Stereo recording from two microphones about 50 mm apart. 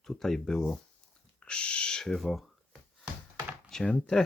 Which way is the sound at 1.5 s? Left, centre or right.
Left.